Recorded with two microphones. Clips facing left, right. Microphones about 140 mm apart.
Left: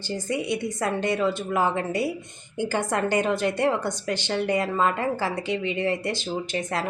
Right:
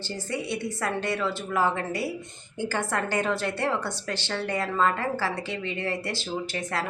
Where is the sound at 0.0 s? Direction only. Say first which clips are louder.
Left 4 dB; 15° left (ahead or behind).